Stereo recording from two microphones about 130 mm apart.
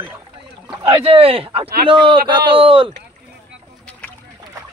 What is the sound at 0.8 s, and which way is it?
A man's voice, 45° right (ahead or behind).